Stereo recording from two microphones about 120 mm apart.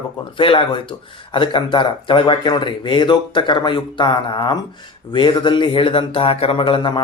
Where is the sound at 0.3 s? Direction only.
45° left (ahead or behind).